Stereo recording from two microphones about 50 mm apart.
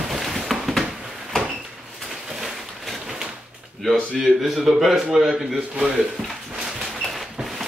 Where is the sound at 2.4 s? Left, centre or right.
Centre.